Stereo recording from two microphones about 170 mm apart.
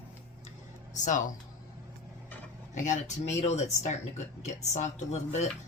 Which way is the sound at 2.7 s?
45° left (ahead or behind).